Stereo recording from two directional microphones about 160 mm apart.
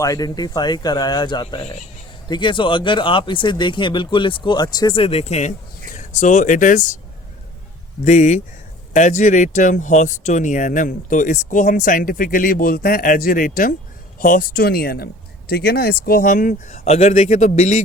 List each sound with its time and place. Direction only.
0.0 s speech: 20° left (ahead or behind); by 6.8 s 55° left (ahead or behind)
8.0 s speech: 45° left (ahead or behind)